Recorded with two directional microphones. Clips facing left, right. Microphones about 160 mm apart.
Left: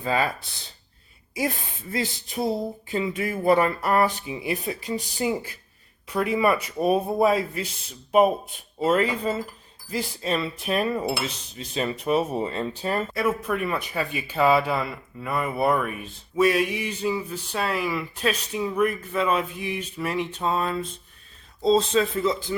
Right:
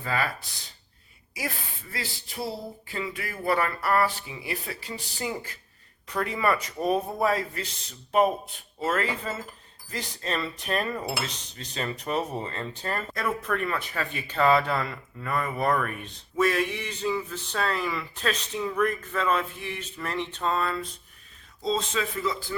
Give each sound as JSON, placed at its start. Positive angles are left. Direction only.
{"t": 0.0, "sound": "speech", "side_deg": 20}
{"t": 8.8, "sound": "speech", "side_deg": 15}
{"t": 21.6, "sound": "speech", "side_deg": 35}